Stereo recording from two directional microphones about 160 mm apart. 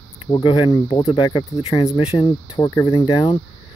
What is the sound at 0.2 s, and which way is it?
Speech, 35° left (ahead or behind).